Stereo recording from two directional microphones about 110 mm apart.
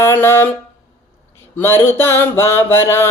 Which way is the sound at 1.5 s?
20° left (ahead or behind).